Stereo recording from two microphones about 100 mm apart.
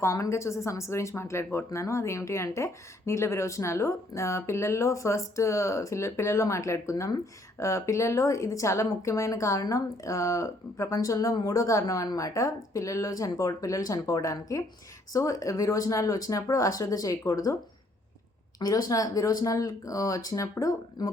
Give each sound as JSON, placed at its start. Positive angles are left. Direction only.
{"t": 0.0, "sound": "speech", "side_deg": 30}
{"t": 18.6, "sound": "speech", "side_deg": 40}